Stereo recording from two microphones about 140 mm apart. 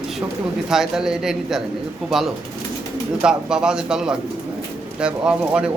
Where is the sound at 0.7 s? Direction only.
5° right (ahead or behind).